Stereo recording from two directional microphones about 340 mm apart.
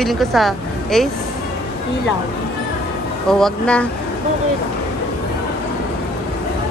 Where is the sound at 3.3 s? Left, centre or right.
Centre.